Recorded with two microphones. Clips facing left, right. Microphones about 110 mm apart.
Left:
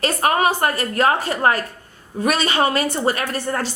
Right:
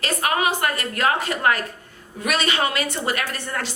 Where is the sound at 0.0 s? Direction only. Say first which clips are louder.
Left 4 dB; 40° left (ahead or behind).